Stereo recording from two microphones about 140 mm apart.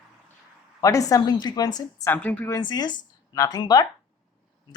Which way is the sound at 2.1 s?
10° left (ahead or behind).